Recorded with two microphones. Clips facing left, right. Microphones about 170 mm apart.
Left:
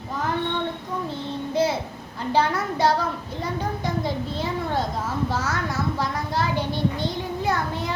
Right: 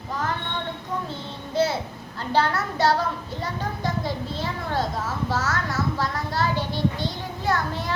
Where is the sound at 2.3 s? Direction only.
15° left (ahead or behind).